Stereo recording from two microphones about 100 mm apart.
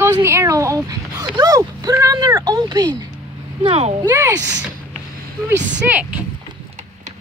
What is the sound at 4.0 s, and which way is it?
Speech, 30° right (ahead or behind).